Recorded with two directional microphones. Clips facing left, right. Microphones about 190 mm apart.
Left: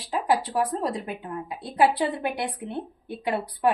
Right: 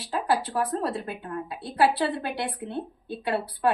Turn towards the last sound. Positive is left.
turn(degrees=15)  # may be behind; listen again after turning